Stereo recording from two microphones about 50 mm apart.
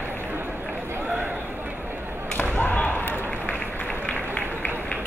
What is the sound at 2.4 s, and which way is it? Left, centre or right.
Basketball bounce, left.